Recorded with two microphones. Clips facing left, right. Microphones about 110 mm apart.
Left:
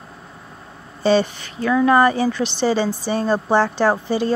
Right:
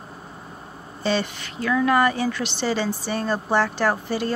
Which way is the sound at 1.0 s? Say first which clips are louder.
Left 7 dB; 30° left (ahead or behind).